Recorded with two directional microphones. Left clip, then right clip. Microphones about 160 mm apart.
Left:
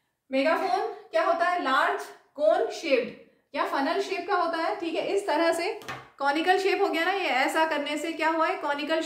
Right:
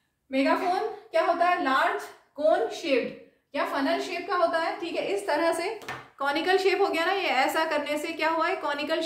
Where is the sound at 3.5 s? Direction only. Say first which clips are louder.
Even; 20° left (ahead or behind).